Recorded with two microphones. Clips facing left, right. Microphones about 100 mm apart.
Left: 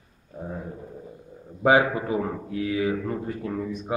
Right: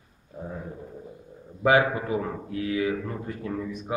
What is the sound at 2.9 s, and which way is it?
Speech, 15° left (ahead or behind).